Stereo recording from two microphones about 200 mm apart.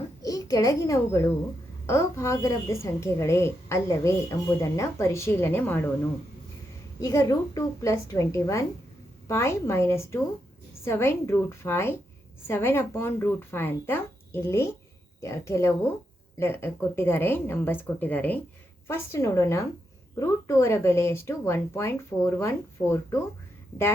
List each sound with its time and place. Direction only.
0.2 s a child's voice: 15° left (ahead or behind)
7.0 s speech: 15° left (ahead or behind)